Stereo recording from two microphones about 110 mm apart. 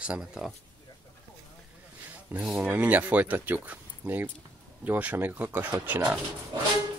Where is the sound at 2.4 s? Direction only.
10° right (ahead or behind).